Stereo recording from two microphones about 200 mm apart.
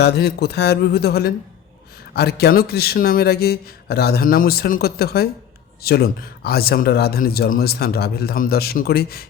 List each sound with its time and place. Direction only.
0.0 s speech: 55° left (ahead or behind)